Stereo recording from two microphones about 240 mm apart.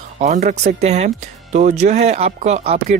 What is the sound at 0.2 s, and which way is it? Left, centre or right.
Speech, right.